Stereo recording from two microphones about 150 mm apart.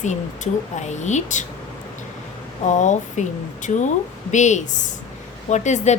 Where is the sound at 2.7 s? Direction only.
55° left (ahead or behind).